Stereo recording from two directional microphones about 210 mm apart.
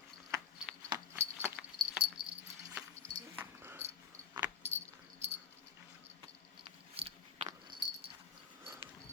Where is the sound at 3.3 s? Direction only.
10° right (ahead or behind).